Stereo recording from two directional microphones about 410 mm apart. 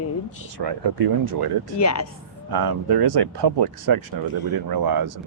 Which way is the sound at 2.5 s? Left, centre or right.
Right.